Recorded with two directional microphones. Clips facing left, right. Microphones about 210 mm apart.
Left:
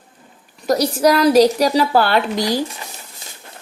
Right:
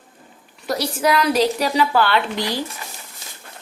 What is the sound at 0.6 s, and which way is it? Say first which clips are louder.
Speech: left 6 dB; 40° left (ahead or behind).